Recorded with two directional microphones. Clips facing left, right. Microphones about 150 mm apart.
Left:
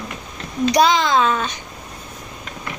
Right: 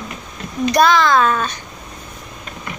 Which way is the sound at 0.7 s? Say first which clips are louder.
Right 2 dB; 15° left (ahead or behind).